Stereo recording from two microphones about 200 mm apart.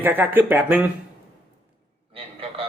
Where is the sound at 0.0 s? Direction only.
10° right (ahead or behind).